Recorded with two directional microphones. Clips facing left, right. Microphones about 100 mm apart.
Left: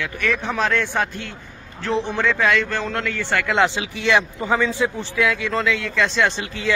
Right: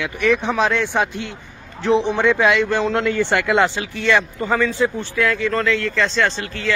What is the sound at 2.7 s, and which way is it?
Speech, 20° right (ahead or behind).